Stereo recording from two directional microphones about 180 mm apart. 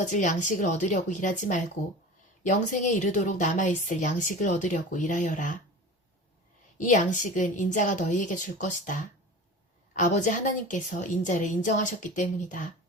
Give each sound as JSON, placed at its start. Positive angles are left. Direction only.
{"t": 0.0, "sound": "a woman's voice", "side_deg": 45}
{"t": 6.7, "sound": "a woman's voice", "side_deg": 45}